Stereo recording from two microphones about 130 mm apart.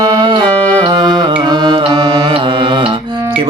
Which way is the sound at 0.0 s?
35° right (ahead or behind).